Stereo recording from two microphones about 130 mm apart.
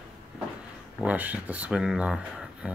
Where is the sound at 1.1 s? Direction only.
10° right (ahead or behind).